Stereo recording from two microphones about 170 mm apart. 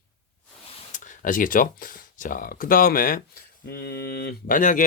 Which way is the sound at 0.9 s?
50° left (ahead or behind).